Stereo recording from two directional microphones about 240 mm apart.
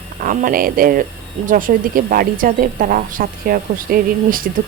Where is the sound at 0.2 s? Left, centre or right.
Right.